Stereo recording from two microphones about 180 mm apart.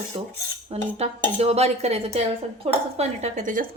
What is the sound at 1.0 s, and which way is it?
Speech, 35° right (ahead or behind).